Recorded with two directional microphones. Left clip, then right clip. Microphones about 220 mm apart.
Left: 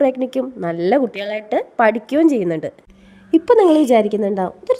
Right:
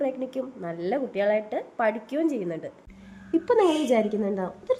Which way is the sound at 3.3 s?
35° left (ahead or behind).